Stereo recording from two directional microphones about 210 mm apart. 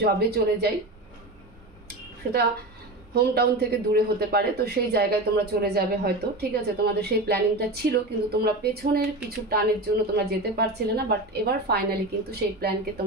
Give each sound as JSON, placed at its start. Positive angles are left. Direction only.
{"t": 0.0, "sound": "a man's voice", "side_deg": -50}
{"t": 3.2, "sound": "a man's voice", "side_deg": -50}